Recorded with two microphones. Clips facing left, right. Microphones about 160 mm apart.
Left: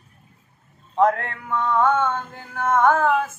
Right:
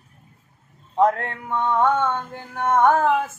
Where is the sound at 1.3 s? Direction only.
25° right (ahead or behind).